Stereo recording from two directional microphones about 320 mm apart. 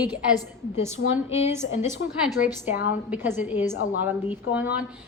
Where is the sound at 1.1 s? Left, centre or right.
Centre.